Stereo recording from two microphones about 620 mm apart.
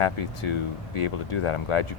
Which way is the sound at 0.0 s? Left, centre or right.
Left.